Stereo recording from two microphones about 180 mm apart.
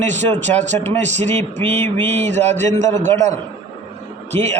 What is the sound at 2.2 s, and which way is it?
Speech, 40° right (ahead or behind).